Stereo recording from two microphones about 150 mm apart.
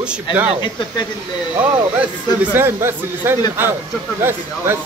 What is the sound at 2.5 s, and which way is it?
Speech, 15° right (ahead or behind).